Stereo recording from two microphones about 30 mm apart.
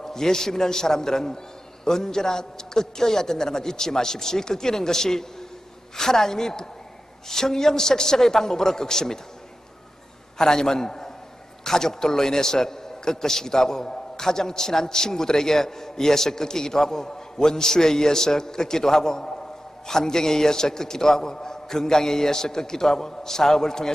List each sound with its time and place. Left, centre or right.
0.0 s a man's voice: centre
10.3 s a man's voice: centre